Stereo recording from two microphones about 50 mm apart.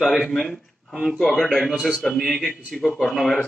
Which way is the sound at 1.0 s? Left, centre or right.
Centre.